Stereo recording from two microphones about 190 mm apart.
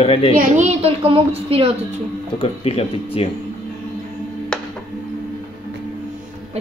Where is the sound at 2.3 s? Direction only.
30° left (ahead or behind).